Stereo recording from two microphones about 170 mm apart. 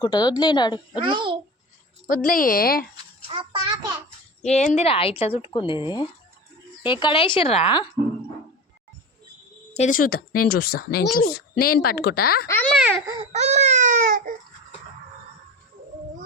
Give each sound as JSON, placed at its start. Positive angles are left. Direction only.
{"t": 0.0, "sound": "speech", "side_deg": 25}
{"t": 1.0, "sound": "a child's voice", "side_deg": -30}
{"t": 2.0, "sound": "speech", "side_deg": 55}
{"t": 3.2, "sound": "a sound", "side_deg": -30}
{"t": 4.4, "sound": "speech", "side_deg": 40}
{"t": 9.7, "sound": "a child's voice", "side_deg": 50}
{"t": 12.8, "sound": "baby cry", "side_deg": -10}
{"t": 13.1, "sound": "baby cry", "side_deg": -40}